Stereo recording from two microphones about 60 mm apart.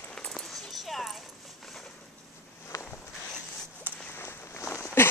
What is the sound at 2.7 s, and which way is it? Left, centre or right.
Walk, left.